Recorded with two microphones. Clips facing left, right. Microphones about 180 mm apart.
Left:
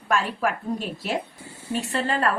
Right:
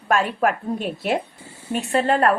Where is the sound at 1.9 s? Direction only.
55° right (ahead or behind).